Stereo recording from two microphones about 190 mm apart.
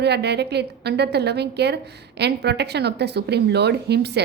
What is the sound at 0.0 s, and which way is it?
A woman's voice, 60° right (ahead or behind).